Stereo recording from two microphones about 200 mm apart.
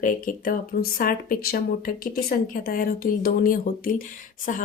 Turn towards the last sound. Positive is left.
turn(degrees=40)  # may be behind; listen again after turning